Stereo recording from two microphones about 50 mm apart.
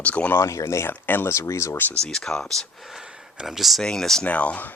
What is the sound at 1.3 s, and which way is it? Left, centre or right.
Speech, left.